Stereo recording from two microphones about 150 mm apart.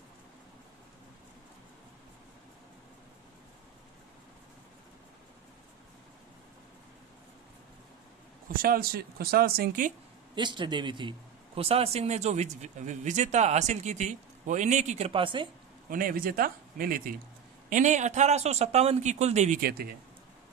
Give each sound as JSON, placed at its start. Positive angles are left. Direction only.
{"t": 8.5, "sound": "speech", "side_deg": -75}
{"t": 10.3, "sound": "a man's voice", "side_deg": -30}
{"t": 15.9, "sound": "speech", "side_deg": -70}
{"t": 17.6, "sound": "a man's voice", "side_deg": -55}
{"t": 19.6, "sound": "speech", "side_deg": -90}